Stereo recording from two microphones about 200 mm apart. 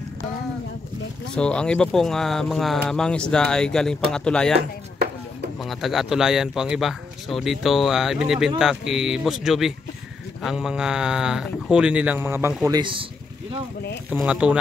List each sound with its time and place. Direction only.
1.3 s speech: 5° left (ahead or behind)
5.6 s speech: centre (ahead or behind); by 13.0 s 20° right (ahead or behind)
14.1 s speech: 5° right (ahead or behind)